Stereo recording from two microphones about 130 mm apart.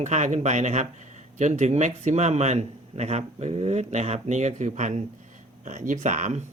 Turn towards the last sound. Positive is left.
turn(degrees=-65)  # may be behind; listen again after turning